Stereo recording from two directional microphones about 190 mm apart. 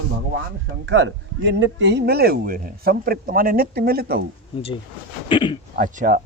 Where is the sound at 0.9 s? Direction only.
70° right (ahead or behind); by 4.2 s 55° right (ahead or behind).